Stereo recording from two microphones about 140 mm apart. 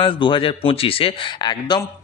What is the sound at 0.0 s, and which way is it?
A man's voice, 35° left (ahead or behind).